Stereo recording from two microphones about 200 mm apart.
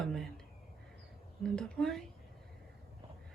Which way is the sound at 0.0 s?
5° left (ahead or behind).